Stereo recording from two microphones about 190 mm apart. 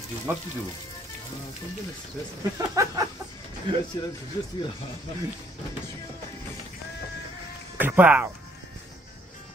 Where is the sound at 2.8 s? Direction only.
15° right (ahead or behind).